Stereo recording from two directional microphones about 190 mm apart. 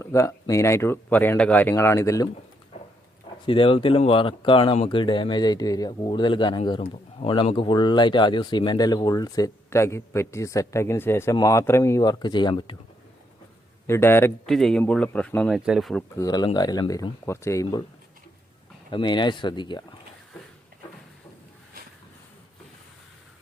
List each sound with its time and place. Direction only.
0.0 s speech: 15° left (ahead or behind)
3.4 s speech: 25° left (ahead or behind)
13.8 s speech: 10° left (ahead or behind)
16.1 s speech: 20° left (ahead or behind)
18.9 s speech: 25° left (ahead or behind)